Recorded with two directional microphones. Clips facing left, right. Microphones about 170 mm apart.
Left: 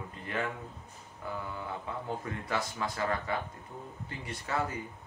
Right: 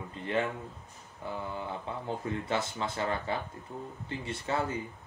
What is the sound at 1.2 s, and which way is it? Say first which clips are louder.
Speech: right 2 dB; 25° right (ahead or behind).